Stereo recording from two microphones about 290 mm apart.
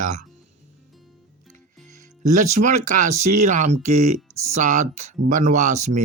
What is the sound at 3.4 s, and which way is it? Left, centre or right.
Speech, right.